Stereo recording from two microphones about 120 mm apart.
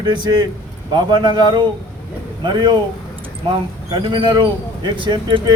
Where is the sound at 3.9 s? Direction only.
40° right (ahead or behind).